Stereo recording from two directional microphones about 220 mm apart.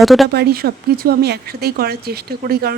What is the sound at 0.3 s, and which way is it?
Speech, 45° right (ahead or behind).